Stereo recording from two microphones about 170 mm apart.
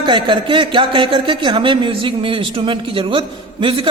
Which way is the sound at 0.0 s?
30° right (ahead or behind).